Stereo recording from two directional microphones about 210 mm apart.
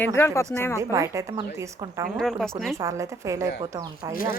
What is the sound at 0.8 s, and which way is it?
A woman's voice, 15° right (ahead or behind).